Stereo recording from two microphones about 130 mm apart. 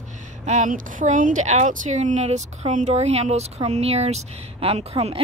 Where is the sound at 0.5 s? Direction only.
80° right.